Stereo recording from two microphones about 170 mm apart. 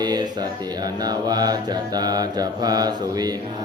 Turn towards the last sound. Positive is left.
turn(degrees=-25)  # may be behind; listen again after turning